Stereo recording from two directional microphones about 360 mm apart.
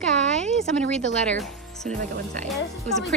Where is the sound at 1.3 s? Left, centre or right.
Centre.